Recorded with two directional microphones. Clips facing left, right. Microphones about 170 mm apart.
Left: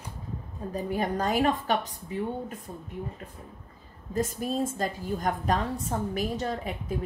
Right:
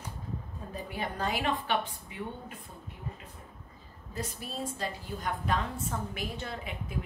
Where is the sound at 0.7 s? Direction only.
45° left (ahead or behind).